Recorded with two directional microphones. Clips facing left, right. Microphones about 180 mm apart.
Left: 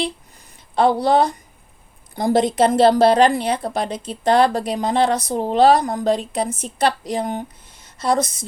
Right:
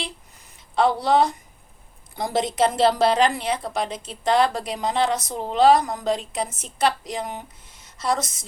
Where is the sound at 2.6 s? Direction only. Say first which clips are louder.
Left 5 dB; 35° left (ahead or behind).